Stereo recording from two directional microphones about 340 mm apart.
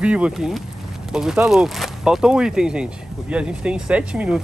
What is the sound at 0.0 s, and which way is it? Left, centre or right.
Speech, centre.